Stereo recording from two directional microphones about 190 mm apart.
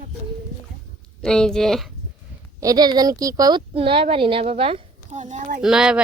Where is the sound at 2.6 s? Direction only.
20° right (ahead or behind); by 5.6 s 40° right (ahead or behind).